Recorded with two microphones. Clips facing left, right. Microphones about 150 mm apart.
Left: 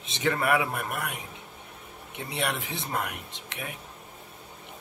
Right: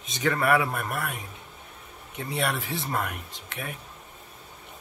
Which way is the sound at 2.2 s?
20° left (ahead or behind).